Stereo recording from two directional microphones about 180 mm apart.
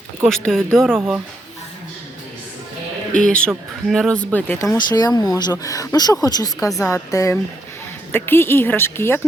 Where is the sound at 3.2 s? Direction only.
5° left (ahead or behind).